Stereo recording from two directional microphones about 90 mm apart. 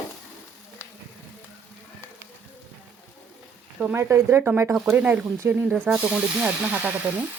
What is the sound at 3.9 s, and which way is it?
Speech, 30° right (ahead or behind).